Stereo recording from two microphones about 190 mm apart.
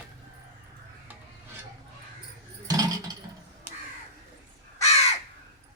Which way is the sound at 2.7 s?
20° right (ahead or behind).